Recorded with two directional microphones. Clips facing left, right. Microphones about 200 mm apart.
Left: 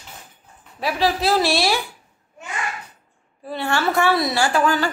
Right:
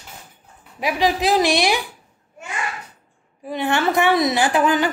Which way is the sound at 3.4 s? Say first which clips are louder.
Right 2 dB; 15° right (ahead or behind).